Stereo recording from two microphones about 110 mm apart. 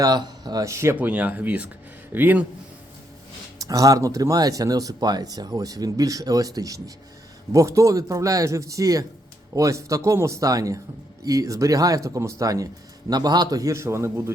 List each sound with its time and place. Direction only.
0.0 s speech: 40° right (ahead or behind)
0.9 s speech: 15° right (ahead or behind)
3.6 s a man's voice: 35° right (ahead or behind)